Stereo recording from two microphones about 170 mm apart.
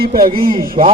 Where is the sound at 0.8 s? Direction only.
45° right (ahead or behind).